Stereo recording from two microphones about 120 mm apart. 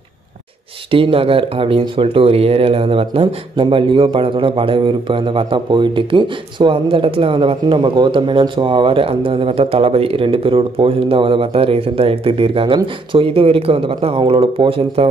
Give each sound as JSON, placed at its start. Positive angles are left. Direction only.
{"t": 0.9, "sound": "speech", "side_deg": -50}